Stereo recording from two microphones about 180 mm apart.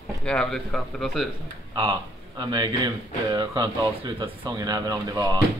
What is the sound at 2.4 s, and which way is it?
Speech, 25° right (ahead or behind).